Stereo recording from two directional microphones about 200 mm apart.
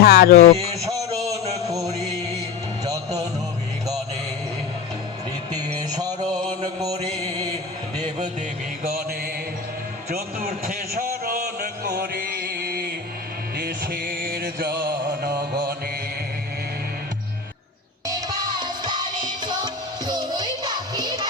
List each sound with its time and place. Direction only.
0.0 s speech: 50° left (ahead or behind)
0.7 s a sound: 15° right (ahead or behind)
1.7 s music: 15° right (ahead or behind)
5.5 s music: 20° right (ahead or behind)
6.6 s mantra: 20° right (ahead or behind)
8.4 s music: 50° right (ahead or behind)
10.1 s a sound: 45° right (ahead or behind)
13.6 s music: 50° right (ahead or behind)
14.8 s mantra: 45° right (ahead or behind)
18.0 s music: 20° right (ahead or behind)